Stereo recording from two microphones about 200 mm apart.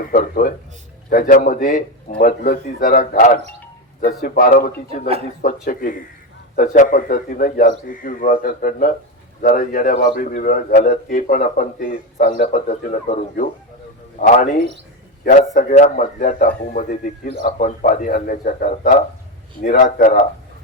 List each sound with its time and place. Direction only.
0.1 s a man's voice: 45° left (ahead or behind)